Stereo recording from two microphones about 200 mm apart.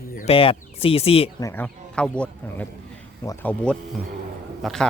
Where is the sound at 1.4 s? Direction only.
10° left (ahead or behind).